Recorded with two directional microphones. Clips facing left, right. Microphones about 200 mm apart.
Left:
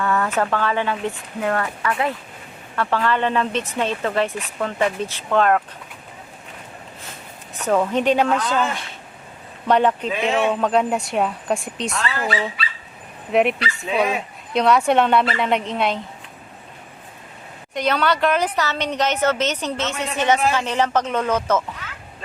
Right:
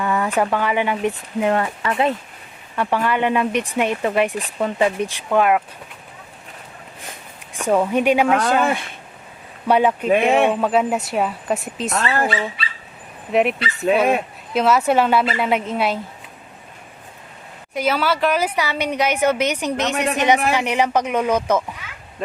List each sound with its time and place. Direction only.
0.0 s a woman's voice: 15° right (ahead or behind)
7.0 s a sound: 15° right (ahead or behind)
8.4 s a woman's voice: 10° right (ahead or behind)
10.1 s speech: 55° right (ahead or behind)
10.5 s a woman's voice: 5° right (ahead or behind)
11.9 s speech: 55° right (ahead or behind)
13.3 s a woman's voice: centre (ahead or behind)
13.9 s speech: 60° right (ahead or behind)
14.5 s a woman's voice: 5° right (ahead or behind)
17.7 s a woman's voice: 5° right (ahead or behind)